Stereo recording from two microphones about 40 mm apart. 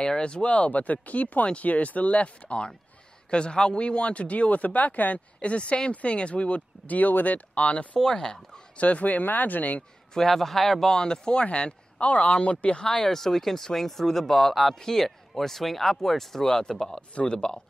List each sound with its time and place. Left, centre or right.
0.0 s speech: left
0.5 s speech: left
5.4 s speech: left
6.9 s speech: left
8.0 s speech: centre
8.7 s speech: left
9.2 s speech: left
10.1 s speech: centre
11.0 s speech: left
12.9 s speech: centre
17.1 s speech: left